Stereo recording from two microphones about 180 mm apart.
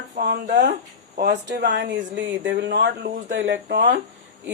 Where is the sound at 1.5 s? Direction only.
70° right (ahead or behind).